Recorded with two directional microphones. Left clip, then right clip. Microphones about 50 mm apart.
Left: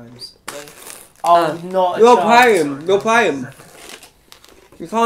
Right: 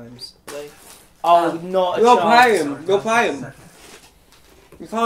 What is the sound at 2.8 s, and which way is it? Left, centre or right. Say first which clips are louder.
Speech: left 3 dB; left.